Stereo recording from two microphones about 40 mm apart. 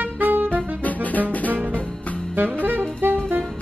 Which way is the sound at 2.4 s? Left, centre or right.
Right.